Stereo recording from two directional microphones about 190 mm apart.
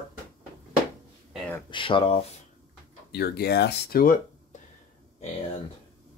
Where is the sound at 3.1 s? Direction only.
55° left (ahead or behind).